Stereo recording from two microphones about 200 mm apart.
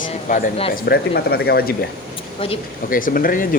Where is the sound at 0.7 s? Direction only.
55° left (ahead or behind).